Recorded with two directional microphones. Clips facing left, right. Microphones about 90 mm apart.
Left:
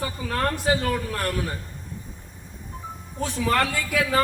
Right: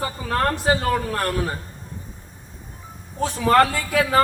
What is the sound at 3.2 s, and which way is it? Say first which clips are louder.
A man's voice: right 6 dB; 40° right (ahead or behind).